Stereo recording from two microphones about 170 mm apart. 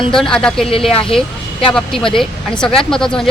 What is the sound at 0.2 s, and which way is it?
Speech, 5° left (ahead or behind).